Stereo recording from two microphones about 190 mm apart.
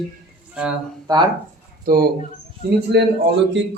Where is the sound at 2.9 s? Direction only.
65° right (ahead or behind).